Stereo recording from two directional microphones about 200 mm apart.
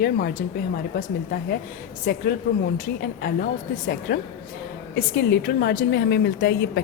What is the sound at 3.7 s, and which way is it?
A woman's voice, 45° left (ahead or behind).